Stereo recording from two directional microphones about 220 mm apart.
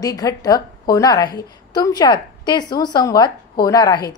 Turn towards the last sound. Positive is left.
turn(degrees=15)  # may be behind; listen again after turning